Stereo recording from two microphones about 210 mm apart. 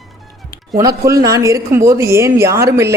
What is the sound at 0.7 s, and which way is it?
Speech, 15° right (ahead or behind).